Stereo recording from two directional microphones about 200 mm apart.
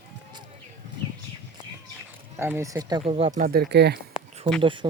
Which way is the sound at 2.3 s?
15° right (ahead or behind).